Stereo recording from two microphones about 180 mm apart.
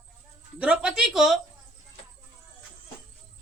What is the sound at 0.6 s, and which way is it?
Speech, 5° right (ahead or behind).